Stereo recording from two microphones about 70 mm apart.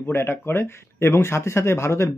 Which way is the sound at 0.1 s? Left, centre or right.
Left.